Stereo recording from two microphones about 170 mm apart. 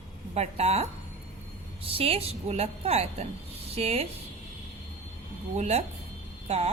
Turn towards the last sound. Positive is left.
turn(degrees=-40)  # may be behind; listen again after turning